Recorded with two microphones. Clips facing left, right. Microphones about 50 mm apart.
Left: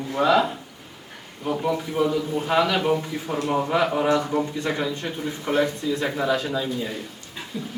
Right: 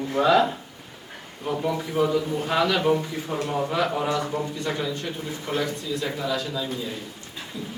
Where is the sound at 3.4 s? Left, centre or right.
Left.